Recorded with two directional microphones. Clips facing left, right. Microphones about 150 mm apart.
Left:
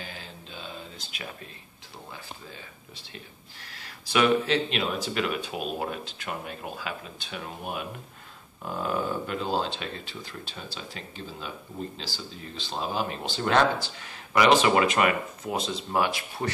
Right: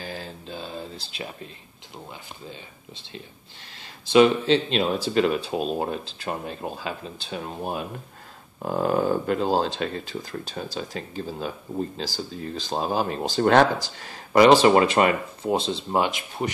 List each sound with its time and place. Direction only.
0.0 s a sound: 40° right (ahead or behind)
3.6 s speech: 25° right (ahead or behind)
8.6 s speech: 45° right (ahead or behind); by 16.5 s 20° right (ahead or behind)